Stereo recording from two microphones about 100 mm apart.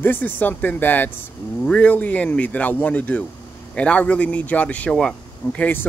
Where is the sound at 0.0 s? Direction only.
20° left (ahead or behind).